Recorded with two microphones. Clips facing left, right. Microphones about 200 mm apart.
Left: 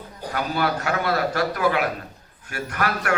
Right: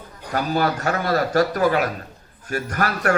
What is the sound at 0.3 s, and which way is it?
Speech, 40° right (ahead or behind).